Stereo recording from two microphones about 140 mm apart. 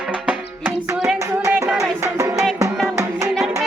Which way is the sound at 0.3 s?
5° right (ahead or behind).